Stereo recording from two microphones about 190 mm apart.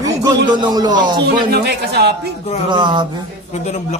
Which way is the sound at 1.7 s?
60° right (ahead or behind).